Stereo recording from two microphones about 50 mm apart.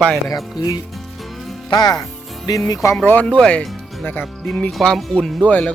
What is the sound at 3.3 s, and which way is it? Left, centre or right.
Speech, left.